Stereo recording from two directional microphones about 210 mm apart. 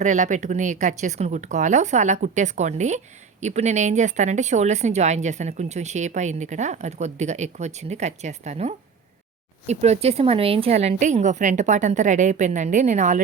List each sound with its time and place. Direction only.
0.0 s speech: 35° right (ahead or behind)